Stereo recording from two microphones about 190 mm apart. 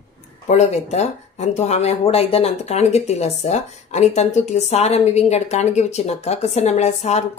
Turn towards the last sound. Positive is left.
turn(degrees=35)  # may be behind; listen again after turning